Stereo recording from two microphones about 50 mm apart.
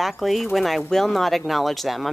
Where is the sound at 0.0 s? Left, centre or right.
Centre.